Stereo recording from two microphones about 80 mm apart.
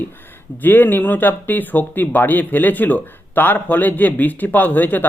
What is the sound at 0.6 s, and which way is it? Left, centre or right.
Speech, left.